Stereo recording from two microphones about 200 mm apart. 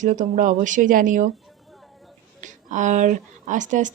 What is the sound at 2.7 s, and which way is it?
Speech, 40° right (ahead or behind).